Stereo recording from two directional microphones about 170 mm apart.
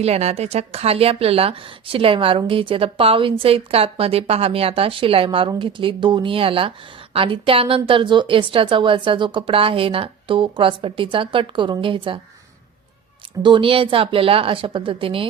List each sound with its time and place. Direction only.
0.0 s speech: 40° right (ahead or behind)
13.4 s speech: 30° right (ahead or behind)